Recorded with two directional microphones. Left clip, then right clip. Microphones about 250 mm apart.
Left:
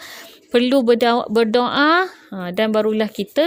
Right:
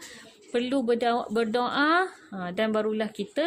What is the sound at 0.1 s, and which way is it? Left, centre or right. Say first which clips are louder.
Speech: left 12 dB; left.